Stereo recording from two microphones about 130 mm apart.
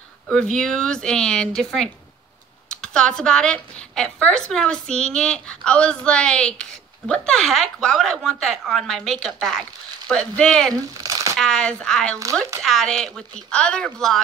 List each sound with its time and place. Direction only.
0.3 s speech: 5° left (ahead or behind)
10.7 s speech: 30° right (ahead or behind)
11.3 s speech: 5° left (ahead or behind)